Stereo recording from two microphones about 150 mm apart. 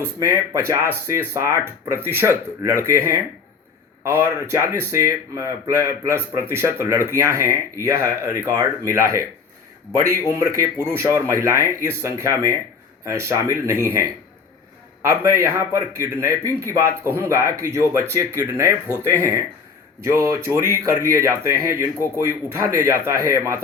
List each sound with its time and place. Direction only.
0.0 s speech: 20° right (ahead or behind)
10.3 s speech: 20° right (ahead or behind)
15.1 s speech: 20° right (ahead or behind)